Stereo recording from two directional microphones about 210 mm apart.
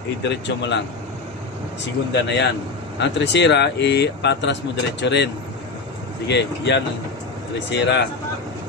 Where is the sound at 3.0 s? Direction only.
55° left (ahead or behind).